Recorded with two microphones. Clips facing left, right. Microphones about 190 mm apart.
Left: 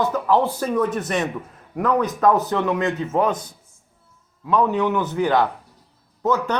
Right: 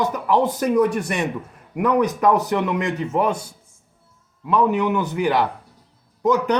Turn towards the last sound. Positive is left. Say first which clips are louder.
# right 3 dB
turn(degrees=-15)  # may be behind; listen again after turning